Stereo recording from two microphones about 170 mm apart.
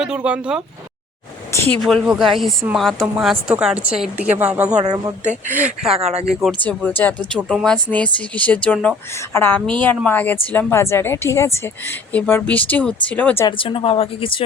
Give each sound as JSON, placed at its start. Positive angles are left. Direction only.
{"t": 0.0, "sound": "speech", "side_deg": -5}
{"t": 1.8, "sound": "speech", "side_deg": 0}
{"t": 13.6, "sound": "speech", "side_deg": 30}